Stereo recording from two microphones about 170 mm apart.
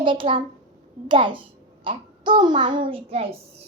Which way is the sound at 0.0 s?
30° right (ahead or behind).